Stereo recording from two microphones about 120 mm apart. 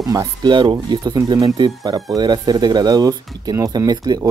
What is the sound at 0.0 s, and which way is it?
Speech, 30° right (ahead or behind).